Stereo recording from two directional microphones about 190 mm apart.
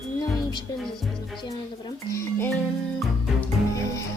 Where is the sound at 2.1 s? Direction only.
10° left (ahead or behind).